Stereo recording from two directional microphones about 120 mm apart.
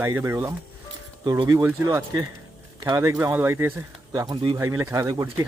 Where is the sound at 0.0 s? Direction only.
20° right (ahead or behind).